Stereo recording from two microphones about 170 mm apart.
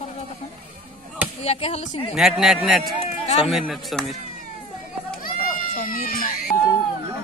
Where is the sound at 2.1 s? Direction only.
5° right (ahead or behind).